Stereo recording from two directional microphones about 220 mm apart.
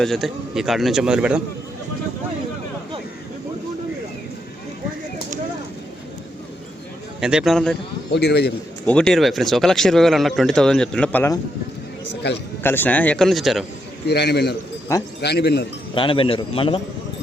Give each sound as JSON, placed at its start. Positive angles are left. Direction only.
{"t": 0.0, "sound": "speech", "side_deg": 0}
{"t": 7.2, "sound": "speech", "side_deg": -5}
{"t": 8.1, "sound": "a man's voice", "side_deg": 50}
{"t": 8.9, "sound": "speech", "side_deg": 5}
{"t": 12.6, "sound": "speech", "side_deg": 10}
{"t": 14.1, "sound": "a man's voice", "side_deg": 50}
{"t": 16.0, "sound": "a man's voice", "side_deg": 25}